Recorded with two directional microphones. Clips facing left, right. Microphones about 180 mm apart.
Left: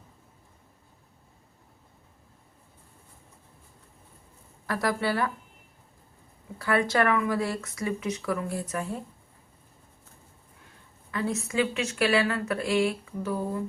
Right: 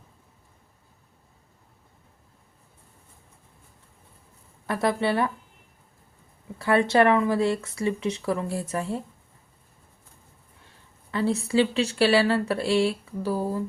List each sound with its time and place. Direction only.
4.6 s speech: 25° right (ahead or behind)
6.6 s speech: 25° right (ahead or behind)
11.1 s speech: 30° right (ahead or behind)